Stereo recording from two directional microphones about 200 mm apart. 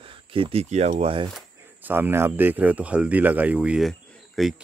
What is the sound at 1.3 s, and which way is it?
Speech, 10° right (ahead or behind).